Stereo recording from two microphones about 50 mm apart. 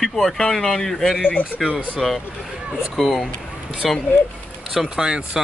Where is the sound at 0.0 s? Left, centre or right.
Centre.